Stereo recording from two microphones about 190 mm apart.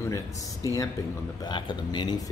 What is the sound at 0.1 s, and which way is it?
A man's voice, 15° left (ahead or behind).